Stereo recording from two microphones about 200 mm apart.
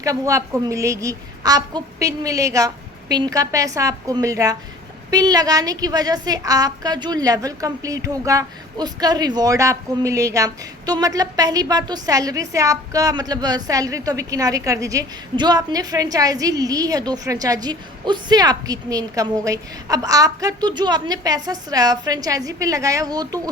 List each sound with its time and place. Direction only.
0.0 s a woman's voice: 15° right (ahead or behind)